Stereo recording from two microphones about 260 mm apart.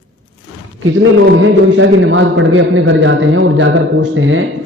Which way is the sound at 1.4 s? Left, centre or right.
Right.